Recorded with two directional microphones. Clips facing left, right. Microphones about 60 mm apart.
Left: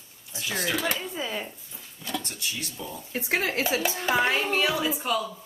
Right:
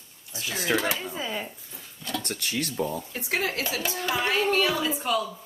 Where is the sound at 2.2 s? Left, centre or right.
Right.